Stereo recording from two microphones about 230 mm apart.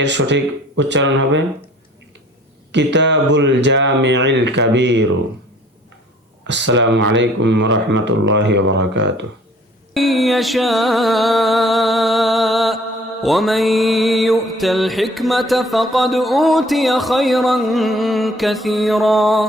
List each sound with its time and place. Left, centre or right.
0.0 s speech: right
2.7 s speech: right
6.5 s speech: right
9.9 s mantra: centre